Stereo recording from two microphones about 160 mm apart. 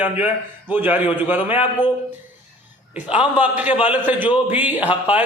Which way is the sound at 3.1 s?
10° right (ahead or behind).